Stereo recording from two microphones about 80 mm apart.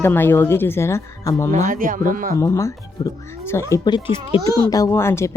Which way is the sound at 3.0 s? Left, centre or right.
Left.